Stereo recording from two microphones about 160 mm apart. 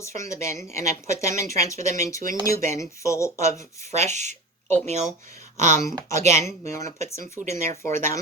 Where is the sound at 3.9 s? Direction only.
45° right (ahead or behind).